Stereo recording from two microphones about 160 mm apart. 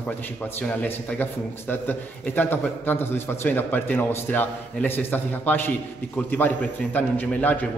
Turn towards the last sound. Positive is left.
turn(degrees=10)  # may be behind; listen again after turning